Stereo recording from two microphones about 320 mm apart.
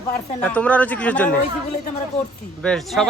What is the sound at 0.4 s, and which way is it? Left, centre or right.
Speech, centre.